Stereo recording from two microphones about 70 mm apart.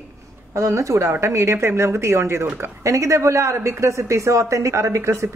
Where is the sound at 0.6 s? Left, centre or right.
Right.